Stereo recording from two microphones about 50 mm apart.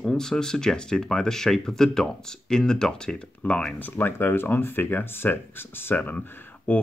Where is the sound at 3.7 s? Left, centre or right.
Left.